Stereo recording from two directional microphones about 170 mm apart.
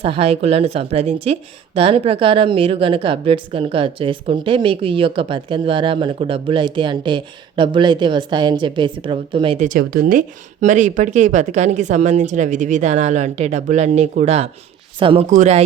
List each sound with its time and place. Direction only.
0.0 s a woman's voice: 35° right (ahead or behind)
9.6 s a woman's voice: 55° right (ahead or behind); by 15.3 s 30° right (ahead or behind)
15.3 s speech: 45° right (ahead or behind)